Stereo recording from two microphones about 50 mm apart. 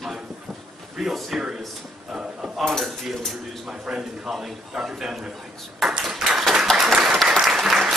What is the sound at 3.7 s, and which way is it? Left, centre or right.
A man's voice, centre.